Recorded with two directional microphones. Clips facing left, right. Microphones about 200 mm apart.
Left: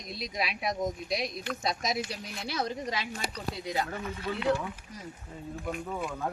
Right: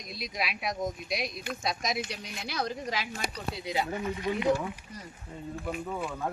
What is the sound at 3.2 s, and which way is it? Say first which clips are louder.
Speech: even; 15° right (ahead or behind).